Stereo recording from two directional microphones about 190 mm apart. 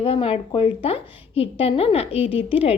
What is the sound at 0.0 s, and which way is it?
Speech, 30° left (ahead or behind).